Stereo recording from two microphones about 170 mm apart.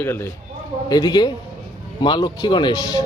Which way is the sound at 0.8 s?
25° left (ahead or behind).